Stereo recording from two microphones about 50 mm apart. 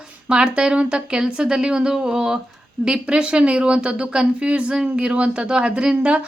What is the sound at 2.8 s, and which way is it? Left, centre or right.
Speech, centre.